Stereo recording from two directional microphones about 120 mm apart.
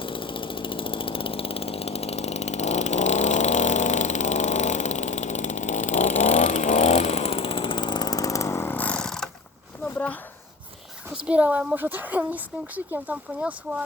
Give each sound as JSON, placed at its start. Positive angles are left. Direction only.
{"t": 0.0, "sound": "chainsaw", "side_deg": 45}
{"t": 11.3, "sound": "speech", "side_deg": -10}